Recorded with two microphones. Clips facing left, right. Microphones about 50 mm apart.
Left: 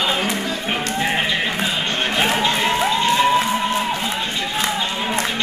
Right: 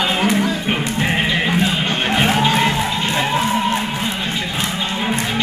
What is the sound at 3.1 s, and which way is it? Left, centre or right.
Music, centre.